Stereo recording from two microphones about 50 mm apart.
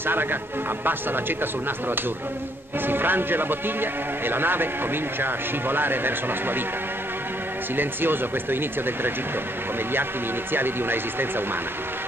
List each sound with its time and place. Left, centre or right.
0.0 s a man's voice: right
7.7 s a man's voice: right
10.5 s a man's voice: right